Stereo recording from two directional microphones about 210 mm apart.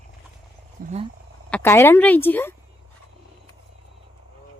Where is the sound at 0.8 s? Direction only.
40° right (ahead or behind).